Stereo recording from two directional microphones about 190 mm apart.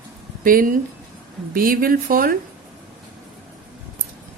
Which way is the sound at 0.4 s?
45° right (ahead or behind).